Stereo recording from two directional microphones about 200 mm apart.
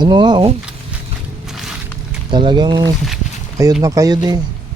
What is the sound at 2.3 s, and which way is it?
Speech, 25° right (ahead or behind).